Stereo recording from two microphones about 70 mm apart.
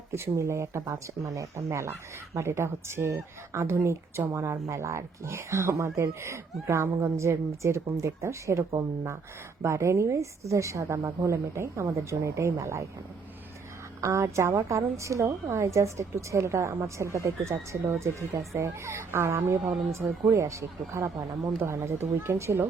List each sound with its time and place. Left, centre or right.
0.1 s a woman's voice: right
9.6 s a woman's voice: right
14.0 s a woman's voice: right